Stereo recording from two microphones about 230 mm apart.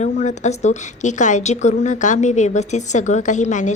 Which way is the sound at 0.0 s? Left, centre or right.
Left.